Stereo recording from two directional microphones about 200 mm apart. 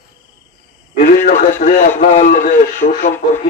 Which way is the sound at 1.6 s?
45° left (ahead or behind).